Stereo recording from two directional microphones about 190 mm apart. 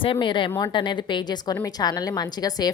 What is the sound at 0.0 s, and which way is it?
Speech, 25° left (ahead or behind).